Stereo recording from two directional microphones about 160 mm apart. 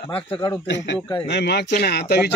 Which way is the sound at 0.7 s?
90° left.